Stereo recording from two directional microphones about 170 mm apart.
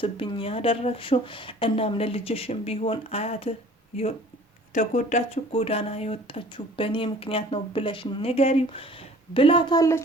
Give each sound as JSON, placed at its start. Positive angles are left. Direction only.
{"t": 0.0, "sound": "speech", "side_deg": 30}
{"t": 4.7, "sound": "speech", "side_deg": 45}